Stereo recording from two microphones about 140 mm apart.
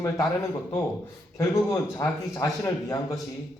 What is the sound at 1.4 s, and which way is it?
A man's voice, 25° left (ahead or behind).